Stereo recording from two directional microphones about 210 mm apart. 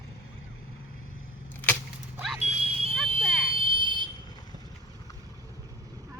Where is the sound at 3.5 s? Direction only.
25° right (ahead or behind).